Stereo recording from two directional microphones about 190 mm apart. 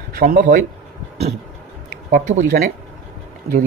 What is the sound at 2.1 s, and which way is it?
Speech, 40° right (ahead or behind).